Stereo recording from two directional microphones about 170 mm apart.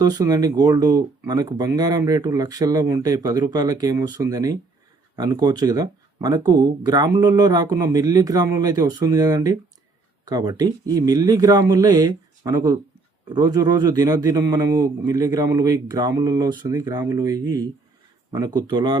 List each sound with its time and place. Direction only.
0.0 s speech: 25° right (ahead or behind)